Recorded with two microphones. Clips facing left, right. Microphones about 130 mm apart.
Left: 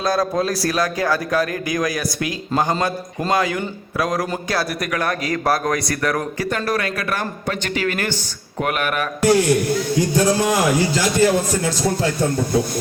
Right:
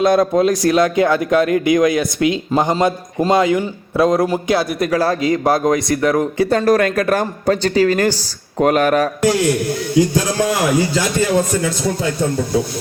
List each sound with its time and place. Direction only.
0.0 s a man's voice: 20° right (ahead or behind)
6.5 s speech: 40° right (ahead or behind)